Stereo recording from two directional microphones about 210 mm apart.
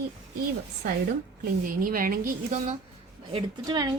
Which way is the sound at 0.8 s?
45° right (ahead or behind).